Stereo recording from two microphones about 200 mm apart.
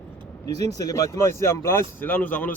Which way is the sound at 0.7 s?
15° left (ahead or behind).